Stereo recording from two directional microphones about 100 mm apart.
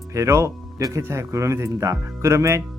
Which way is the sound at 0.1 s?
30° right (ahead or behind).